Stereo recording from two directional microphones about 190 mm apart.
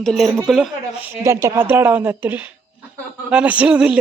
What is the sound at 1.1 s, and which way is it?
A woman's voice, 15° right (ahead or behind).